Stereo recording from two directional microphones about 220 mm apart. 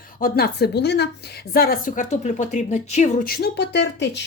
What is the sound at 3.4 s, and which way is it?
Speech, 50° left (ahead or behind).